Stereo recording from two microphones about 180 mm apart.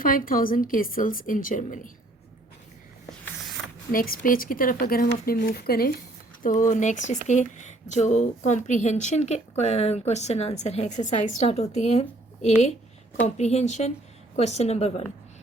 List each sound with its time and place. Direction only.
0.0 s speech: 50° left (ahead or behind)
3.9 s speech: 55° left (ahead or behind)
6.4 s a woman's voice: 45° left (ahead or behind)